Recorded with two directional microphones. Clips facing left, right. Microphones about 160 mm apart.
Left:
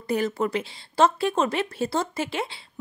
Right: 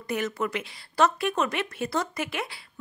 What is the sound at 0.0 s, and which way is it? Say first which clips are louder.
Speech: left 4 dB; 30° left (ahead or behind).